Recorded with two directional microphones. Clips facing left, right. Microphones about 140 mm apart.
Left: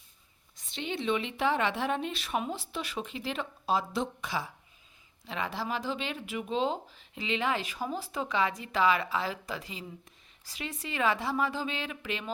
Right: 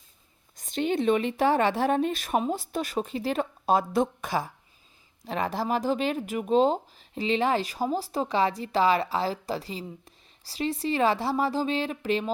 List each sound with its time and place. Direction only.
0.5 s speech: 45° right (ahead or behind)